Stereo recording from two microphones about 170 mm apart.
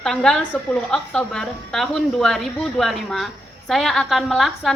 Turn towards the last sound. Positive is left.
turn(degrees=0)  # may be behind; listen again after turning